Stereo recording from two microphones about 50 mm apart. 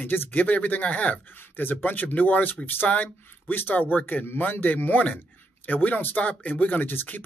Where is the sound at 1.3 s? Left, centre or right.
Left.